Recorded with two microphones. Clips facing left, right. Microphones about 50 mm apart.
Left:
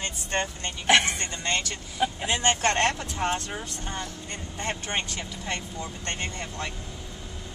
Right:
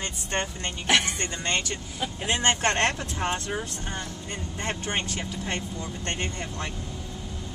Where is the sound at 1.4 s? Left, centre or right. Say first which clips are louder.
Even; right.